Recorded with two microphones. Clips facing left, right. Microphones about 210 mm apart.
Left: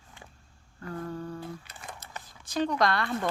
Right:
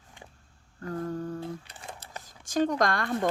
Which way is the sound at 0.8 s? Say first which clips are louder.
Right 3 dB; 45° right (ahead or behind).